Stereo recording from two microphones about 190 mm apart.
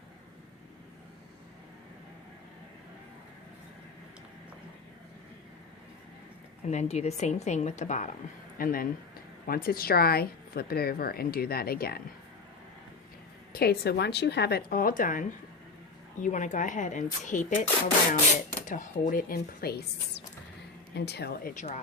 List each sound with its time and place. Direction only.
6.7 s a woman's voice: 35° left (ahead or behind); by 12.0 s 55° left (ahead or behind)
13.5 s a woman's voice: 55° left (ahead or behind)
21.5 s speech: 40° left (ahead or behind)